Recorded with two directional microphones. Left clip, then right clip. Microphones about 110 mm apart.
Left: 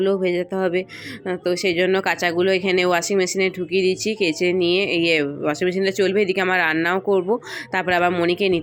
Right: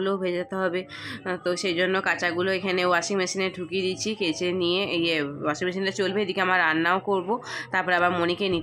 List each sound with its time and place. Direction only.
0.0 s speech: 20° left (ahead or behind)